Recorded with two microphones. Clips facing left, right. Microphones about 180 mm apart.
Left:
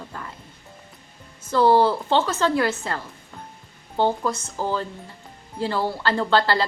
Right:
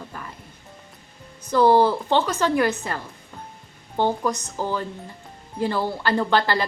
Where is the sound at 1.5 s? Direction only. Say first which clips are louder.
Right 1 dB; 15° right (ahead or behind).